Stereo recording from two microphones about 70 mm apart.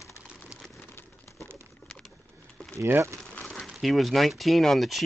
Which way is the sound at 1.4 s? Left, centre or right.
Right.